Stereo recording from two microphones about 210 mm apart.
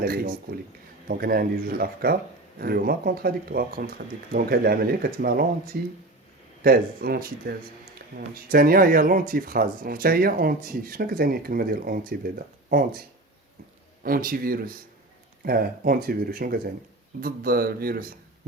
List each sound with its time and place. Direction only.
0.0 s speech: 45° right (ahead or behind)
14.0 s speech: 40° right (ahead or behind)